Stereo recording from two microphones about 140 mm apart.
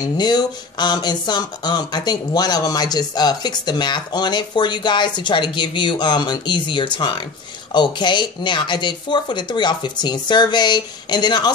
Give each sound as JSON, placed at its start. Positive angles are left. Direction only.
{"t": 0.2, "sound": "speech", "side_deg": 30}